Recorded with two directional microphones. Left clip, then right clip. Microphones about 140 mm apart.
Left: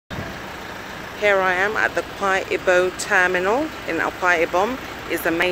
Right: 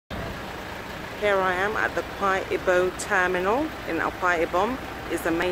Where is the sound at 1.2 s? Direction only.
15° left (ahead or behind).